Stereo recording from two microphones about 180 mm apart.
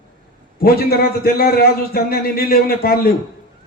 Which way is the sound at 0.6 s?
55° left (ahead or behind).